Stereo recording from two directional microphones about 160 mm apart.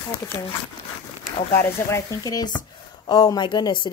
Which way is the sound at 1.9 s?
20° left (ahead or behind).